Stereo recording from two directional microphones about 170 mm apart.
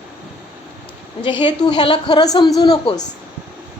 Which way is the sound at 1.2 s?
25° left (ahead or behind).